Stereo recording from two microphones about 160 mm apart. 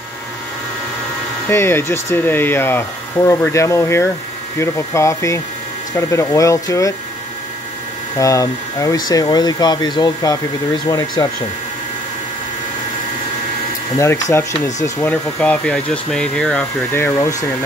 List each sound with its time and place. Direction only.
1.5 s speech: 15° left (ahead or behind)
8.2 s speech: 20° left (ahead or behind)
13.9 s speech: 20° left (ahead or behind)
16.9 s speech: 15° left (ahead or behind)